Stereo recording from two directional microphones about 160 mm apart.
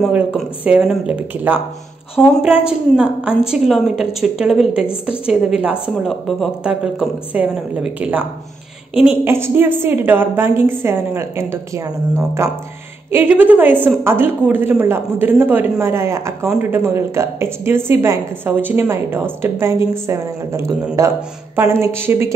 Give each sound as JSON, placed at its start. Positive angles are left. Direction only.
{"t": 0.1, "sound": "a woman's voice", "side_deg": -10}